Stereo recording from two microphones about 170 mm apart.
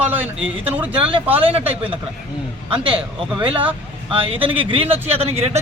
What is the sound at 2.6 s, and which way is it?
Speech, 30° right (ahead or behind).